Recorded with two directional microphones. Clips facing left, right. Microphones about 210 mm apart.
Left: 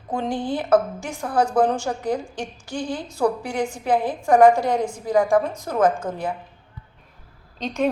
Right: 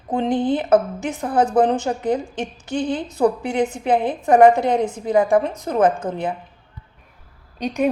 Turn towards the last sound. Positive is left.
turn(degrees=-10)  # may be behind; listen again after turning